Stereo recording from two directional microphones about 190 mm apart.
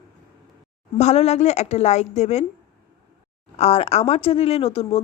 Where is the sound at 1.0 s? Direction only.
35° left (ahead or behind).